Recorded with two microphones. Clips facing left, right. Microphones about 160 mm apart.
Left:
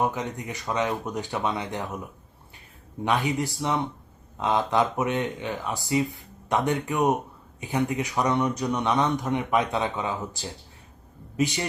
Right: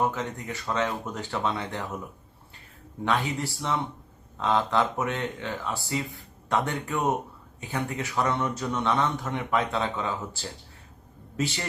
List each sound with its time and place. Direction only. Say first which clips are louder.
0.0 s speech: left 1 dB; 15° left (ahead or behind)
3.0 s speech: left 2 dB; 15° left (ahead or behind)